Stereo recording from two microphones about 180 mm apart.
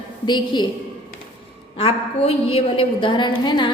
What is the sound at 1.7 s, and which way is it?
A woman's voice, 30° left (ahead or behind).